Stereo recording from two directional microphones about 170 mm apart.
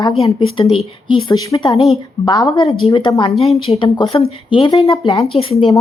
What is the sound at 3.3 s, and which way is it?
Speech, centre (ahead or behind).